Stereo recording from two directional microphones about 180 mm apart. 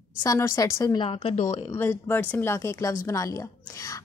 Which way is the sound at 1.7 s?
10° left (ahead or behind).